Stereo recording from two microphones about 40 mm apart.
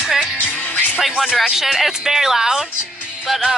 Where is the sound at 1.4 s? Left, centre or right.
Centre.